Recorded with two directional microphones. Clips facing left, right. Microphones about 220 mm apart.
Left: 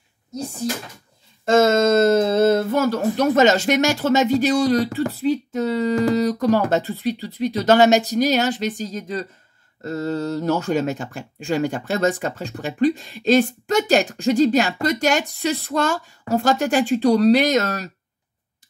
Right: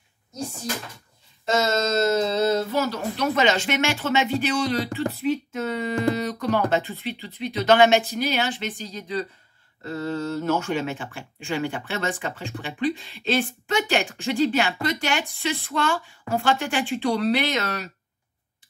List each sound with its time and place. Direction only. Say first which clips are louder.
1.4 s speech: left 8 dB; 50° left (ahead or behind)